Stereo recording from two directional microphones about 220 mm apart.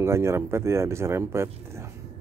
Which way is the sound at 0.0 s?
10° right (ahead or behind).